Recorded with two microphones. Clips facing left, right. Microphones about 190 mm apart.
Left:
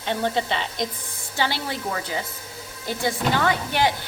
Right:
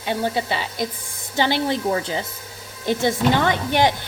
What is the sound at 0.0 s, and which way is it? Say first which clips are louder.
Speech: right 1 dB; 10° right (ahead or behind).